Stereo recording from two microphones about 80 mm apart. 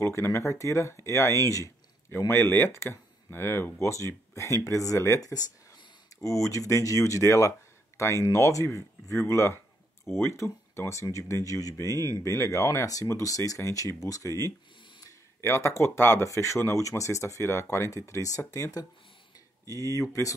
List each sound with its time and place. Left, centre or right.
0.0 s speech: left